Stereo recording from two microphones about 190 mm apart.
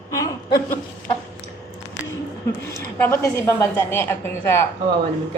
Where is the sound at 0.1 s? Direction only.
15° left (ahead or behind).